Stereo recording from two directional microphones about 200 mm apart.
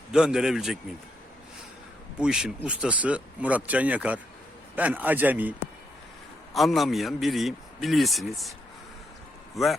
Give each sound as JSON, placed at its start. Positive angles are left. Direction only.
{"t": 0.1, "sound": "a man's voice", "side_deg": -5}
{"t": 2.1, "sound": "a man's voice", "side_deg": -5}
{"t": 9.6, "sound": "a man's voice", "side_deg": 0}